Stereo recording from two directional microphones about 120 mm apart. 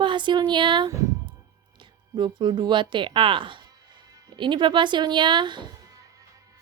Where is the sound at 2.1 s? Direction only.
40° right (ahead or behind).